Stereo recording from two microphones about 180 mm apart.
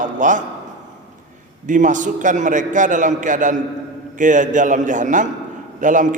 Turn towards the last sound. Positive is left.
turn(degrees=-45)  # may be behind; listen again after turning